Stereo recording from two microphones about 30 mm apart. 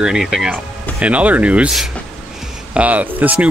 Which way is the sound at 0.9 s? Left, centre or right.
Right.